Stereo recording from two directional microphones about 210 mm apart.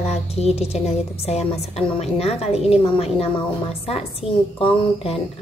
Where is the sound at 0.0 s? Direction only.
30° left (ahead or behind).